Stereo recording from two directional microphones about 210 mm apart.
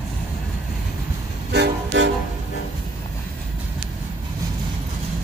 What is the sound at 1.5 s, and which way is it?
Train, 55° right (ahead or behind).